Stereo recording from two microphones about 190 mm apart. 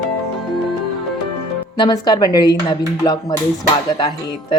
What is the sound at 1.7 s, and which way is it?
A woman's voice, 25° left (ahead or behind).